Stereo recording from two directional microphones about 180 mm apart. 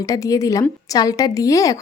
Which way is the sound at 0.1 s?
20° left (ahead or behind).